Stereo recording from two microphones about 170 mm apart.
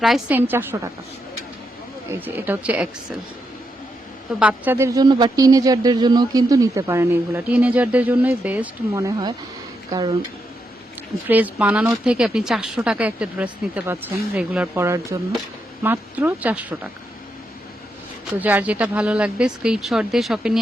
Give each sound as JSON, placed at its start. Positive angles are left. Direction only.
{"t": 0.0, "sound": "speech", "side_deg": -5}
{"t": 2.0, "sound": "speech", "side_deg": -10}
{"t": 4.4, "sound": "speech", "side_deg": -10}
{"t": 11.3, "sound": "speech", "side_deg": -10}
{"t": 18.3, "sound": "speech", "side_deg": -10}